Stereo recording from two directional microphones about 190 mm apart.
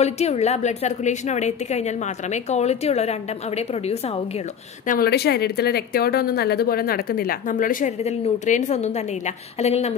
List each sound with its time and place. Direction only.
0.0 s a woman's voice: 35° left (ahead or behind)
4.8 s speech: 50° left (ahead or behind); by 9.9 s 35° left (ahead or behind)